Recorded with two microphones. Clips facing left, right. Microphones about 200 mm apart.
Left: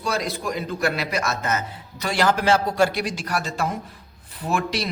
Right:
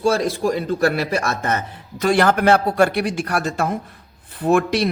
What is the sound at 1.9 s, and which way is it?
Speech, 50° right (ahead or behind).